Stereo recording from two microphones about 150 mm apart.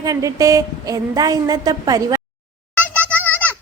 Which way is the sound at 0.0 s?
25° right (ahead or behind).